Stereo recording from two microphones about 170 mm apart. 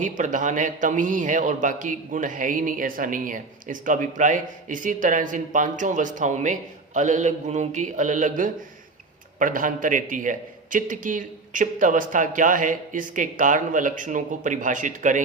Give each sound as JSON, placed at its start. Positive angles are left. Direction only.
{"t": 0.0, "sound": "a man's voice", "side_deg": -45}